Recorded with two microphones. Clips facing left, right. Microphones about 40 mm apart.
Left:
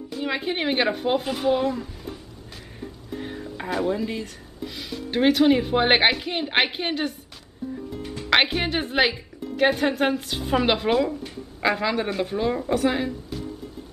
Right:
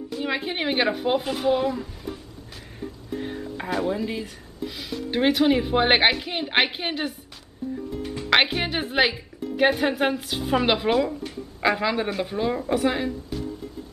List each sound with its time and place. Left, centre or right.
0.1 s speech: centre
3.2 s a woman's voice: centre